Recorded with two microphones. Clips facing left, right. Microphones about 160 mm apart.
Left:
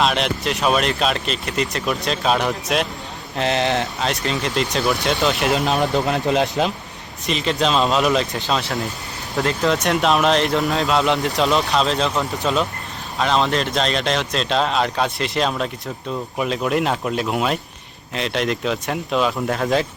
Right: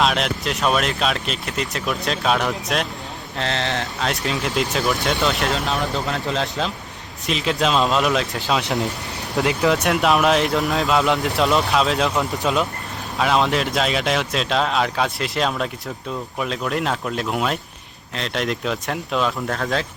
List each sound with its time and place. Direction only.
0.0 s speech: centre (ahead or behind)
3.3 s speech: 15° left (ahead or behind)
4.0 s speech: centre (ahead or behind)
5.5 s speech: 15° left (ahead or behind)
7.3 s speech: 5° right (ahead or behind)